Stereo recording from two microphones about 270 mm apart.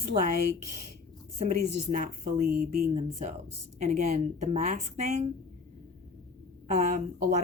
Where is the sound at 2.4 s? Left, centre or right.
Right.